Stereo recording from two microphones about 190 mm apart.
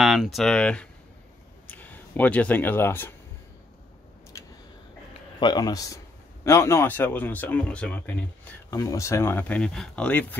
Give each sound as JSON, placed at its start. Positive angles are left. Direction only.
{"t": 0.0, "sound": "speech", "side_deg": 0}
{"t": 5.4, "sound": "speech", "side_deg": 20}